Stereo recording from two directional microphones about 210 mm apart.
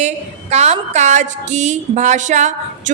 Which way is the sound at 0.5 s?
30° right (ahead or behind).